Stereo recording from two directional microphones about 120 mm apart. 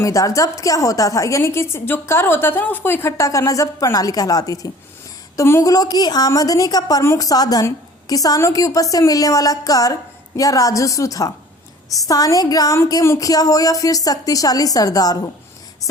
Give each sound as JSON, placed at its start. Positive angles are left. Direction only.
{"t": 0.0, "sound": "a woman's voice", "side_deg": 30}